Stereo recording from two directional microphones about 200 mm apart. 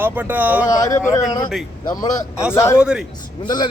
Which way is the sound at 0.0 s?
10° right (ahead or behind).